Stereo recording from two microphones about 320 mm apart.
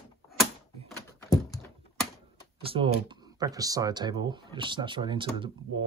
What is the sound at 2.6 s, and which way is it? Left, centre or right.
Speech, centre.